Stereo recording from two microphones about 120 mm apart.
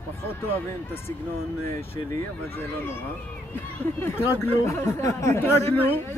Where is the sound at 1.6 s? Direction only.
20° left (ahead or behind).